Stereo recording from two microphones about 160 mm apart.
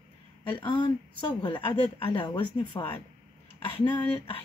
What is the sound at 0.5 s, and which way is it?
Speech, 30° left (ahead or behind).